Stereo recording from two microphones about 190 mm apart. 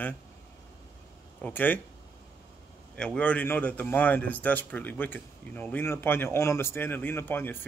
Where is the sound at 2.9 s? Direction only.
5° left (ahead or behind).